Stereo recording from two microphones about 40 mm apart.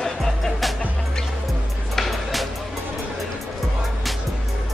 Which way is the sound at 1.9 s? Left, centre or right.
Centre.